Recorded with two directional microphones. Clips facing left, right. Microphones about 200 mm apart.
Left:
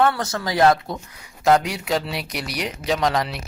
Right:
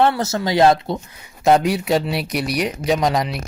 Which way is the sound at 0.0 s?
25° right (ahead or behind).